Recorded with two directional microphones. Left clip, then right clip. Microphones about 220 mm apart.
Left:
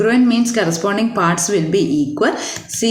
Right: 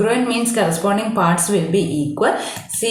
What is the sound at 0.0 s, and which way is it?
Speech, 45° left (ahead or behind).